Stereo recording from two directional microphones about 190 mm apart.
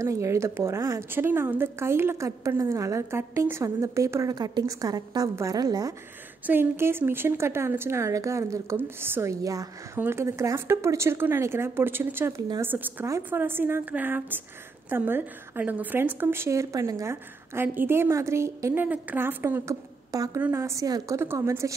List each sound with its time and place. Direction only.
0.0 s a woman's voice: 15° right (ahead or behind)